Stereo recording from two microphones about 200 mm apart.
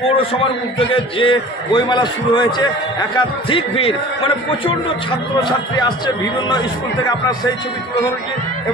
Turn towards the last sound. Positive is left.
turn(degrees=20)  # may be behind; listen again after turning